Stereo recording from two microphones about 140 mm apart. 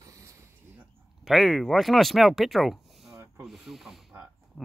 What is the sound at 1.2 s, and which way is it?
Speech, centre (ahead or behind).